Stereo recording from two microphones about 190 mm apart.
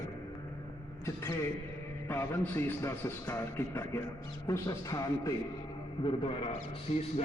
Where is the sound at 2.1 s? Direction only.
10° left (ahead or behind).